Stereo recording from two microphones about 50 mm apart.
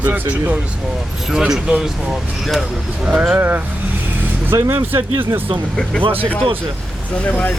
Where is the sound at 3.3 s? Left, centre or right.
Right.